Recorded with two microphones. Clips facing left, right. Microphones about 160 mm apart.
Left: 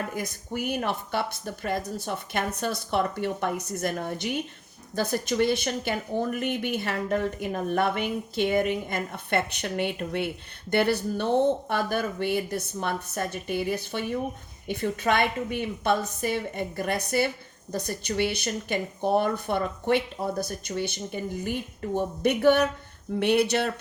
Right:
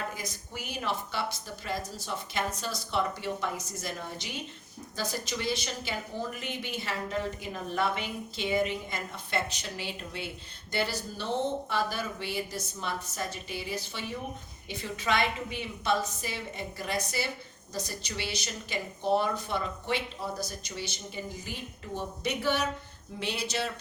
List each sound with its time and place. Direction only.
0.1 s speech: 55° left (ahead or behind)